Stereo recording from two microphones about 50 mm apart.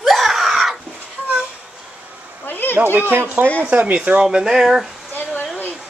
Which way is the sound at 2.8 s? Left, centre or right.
Right.